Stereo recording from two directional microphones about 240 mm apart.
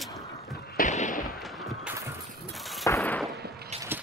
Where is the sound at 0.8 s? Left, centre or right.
Left.